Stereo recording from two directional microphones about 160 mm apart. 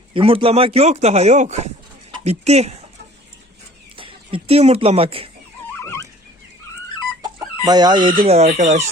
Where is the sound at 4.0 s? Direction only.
35° right (ahead or behind).